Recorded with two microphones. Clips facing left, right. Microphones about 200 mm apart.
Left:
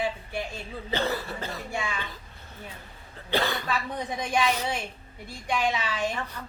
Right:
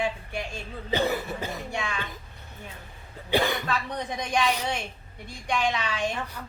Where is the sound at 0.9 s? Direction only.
15° right (ahead or behind).